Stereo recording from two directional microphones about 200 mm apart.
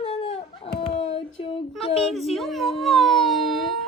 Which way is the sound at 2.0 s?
Centre (ahead or behind).